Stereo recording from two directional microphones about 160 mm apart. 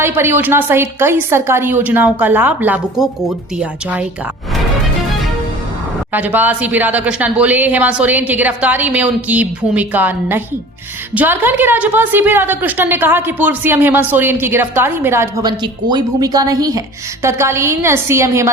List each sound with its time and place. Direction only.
0.0 s a woman's voice: 15° right (ahead or behind)
6.1 s a woman's voice: 10° right (ahead or behind)